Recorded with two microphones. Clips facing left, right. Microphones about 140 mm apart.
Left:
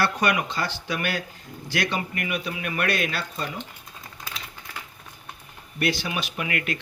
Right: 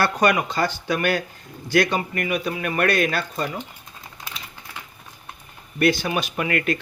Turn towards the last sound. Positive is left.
turn(degrees=-40)  # may be behind; listen again after turning